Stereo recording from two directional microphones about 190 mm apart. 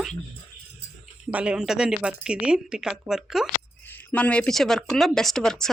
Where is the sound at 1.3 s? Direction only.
5° right (ahead or behind).